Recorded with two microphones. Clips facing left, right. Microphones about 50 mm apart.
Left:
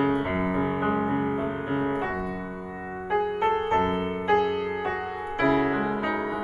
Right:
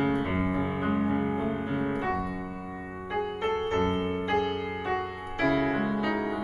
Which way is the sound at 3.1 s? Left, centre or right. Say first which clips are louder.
Left 5 dB; centre.